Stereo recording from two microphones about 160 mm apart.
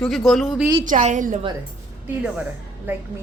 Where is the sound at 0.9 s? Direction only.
50° right (ahead or behind).